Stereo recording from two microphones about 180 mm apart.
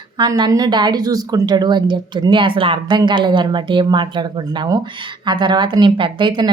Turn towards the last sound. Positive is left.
turn(degrees=-25)  # may be behind; listen again after turning